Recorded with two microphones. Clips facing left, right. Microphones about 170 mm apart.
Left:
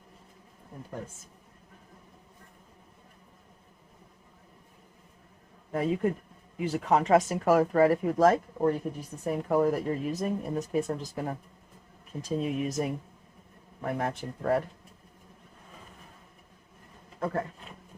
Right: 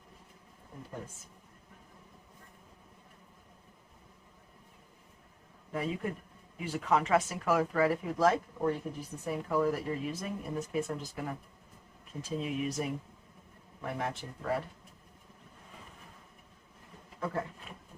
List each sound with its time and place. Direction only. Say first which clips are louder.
5.7 s speech: left 7 dB; 40° left (ahead or behind)
12.4 s speech: left 4 dB; 40° left (ahead or behind)
17.2 s speech: left 4 dB; 50° left (ahead or behind)